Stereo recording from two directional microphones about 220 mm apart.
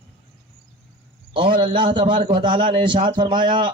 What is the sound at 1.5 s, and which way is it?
Speech, 20° right (ahead or behind).